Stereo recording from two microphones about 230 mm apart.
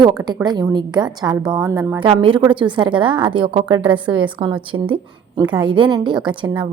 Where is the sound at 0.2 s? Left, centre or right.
Centre.